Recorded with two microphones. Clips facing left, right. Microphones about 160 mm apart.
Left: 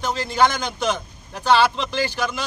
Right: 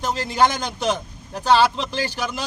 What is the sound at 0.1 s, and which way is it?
Speech, 40° right (ahead or behind).